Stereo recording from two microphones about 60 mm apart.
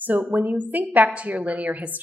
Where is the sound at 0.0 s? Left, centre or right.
Right.